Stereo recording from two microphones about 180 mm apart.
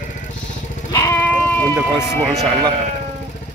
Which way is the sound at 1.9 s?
15° left (ahead or behind).